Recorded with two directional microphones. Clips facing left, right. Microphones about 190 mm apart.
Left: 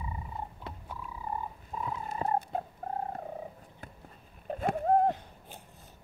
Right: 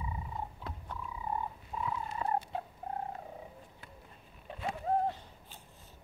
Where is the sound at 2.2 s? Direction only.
35° left (ahead or behind).